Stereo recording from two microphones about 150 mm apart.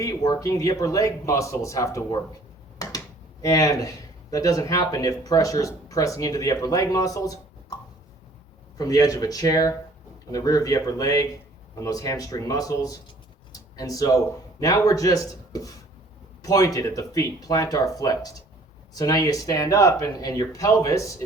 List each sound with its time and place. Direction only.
0.0 s speech: 25° left (ahead or behind)
3.4 s speech: 25° left (ahead or behind)
8.8 s speech: 25° left (ahead or behind)